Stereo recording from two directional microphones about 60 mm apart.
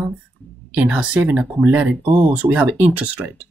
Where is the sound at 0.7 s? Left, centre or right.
Centre.